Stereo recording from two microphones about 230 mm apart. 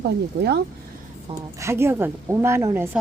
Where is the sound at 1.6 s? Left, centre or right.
Centre.